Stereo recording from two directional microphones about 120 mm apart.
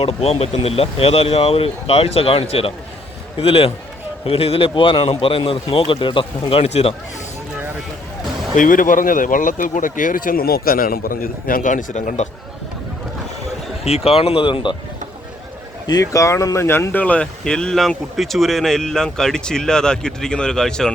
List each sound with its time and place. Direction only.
0.0 s speech: 55° left (ahead or behind)
8.5 s speech: 90° left
11.6 s speech: 90° left
13.8 s speech: 55° left (ahead or behind)
15.9 s speech: 30° left (ahead or behind); by 20.9 s 5° left (ahead or behind)